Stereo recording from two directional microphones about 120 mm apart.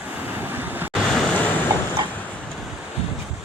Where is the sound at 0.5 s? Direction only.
15° right (ahead or behind).